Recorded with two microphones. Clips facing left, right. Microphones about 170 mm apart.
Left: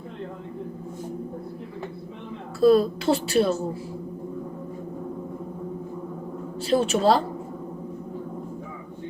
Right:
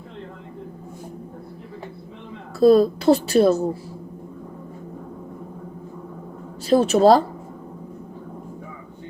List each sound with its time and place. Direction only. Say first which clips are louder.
2.6 s a woman's voice: right 3 dB; 40° right (ahead or behind)
6.7 s a woman's voice: right 6 dB; 40° right (ahead or behind)